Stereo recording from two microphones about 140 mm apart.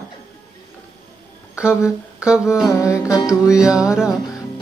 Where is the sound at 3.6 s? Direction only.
5° right (ahead or behind).